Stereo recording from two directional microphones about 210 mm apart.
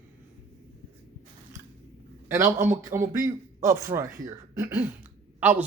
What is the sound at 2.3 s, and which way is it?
A man's voice, 10° right (ahead or behind).